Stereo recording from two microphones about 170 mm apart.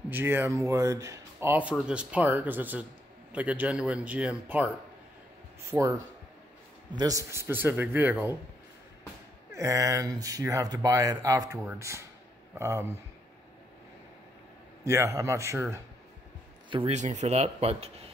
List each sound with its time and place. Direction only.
0.1 s speech: 10° right (ahead or behind)
5.7 s speech: 20° right (ahead or behind)
7.0 s speech: 20° right (ahead or behind)
9.5 s speech: 15° right (ahead or behind)
14.9 s speech: 15° right (ahead or behind)
16.7 s speech: 40° right (ahead or behind)